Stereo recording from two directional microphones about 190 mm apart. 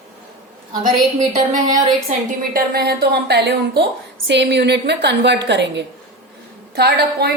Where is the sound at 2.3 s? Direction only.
50° right (ahead or behind).